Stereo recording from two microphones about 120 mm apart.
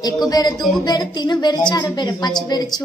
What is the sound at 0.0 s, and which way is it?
A woman's voice, 35° left (ahead or behind).